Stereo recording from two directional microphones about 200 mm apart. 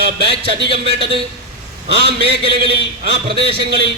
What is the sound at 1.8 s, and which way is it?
Speech, 50° right (ahead or behind).